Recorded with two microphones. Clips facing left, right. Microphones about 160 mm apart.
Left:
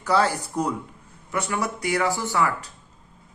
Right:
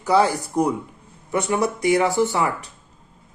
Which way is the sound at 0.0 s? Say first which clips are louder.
Right 4 dB; 15° right (ahead or behind).